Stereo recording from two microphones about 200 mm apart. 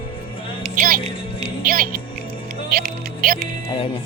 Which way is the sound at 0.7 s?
40° right (ahead or behind).